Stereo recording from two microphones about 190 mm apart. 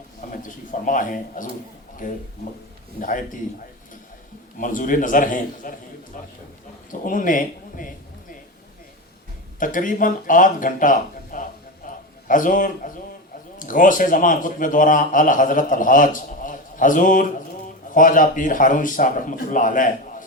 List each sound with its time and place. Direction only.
0.3 s a man's voice: 45° left (ahead or behind)
4.5 s a man's voice: 45° left (ahead or behind)
9.6 s a man's voice: 45° left (ahead or behind)
11.9 s a sound: 45° left (ahead or behind)
12.3 s a man's voice: 45° left (ahead or behind)